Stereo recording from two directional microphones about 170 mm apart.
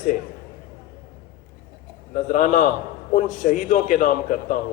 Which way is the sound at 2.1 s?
50° left (ahead or behind).